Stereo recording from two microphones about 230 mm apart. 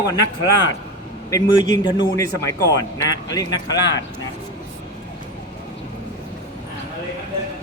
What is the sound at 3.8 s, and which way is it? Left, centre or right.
Speech, left.